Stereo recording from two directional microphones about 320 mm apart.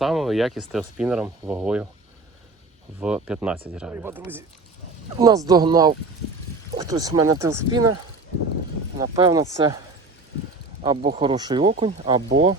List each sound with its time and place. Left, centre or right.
0.0 s speech: centre
3.0 s speech: centre
9.0 s speech: centre
11.1 s speech: centre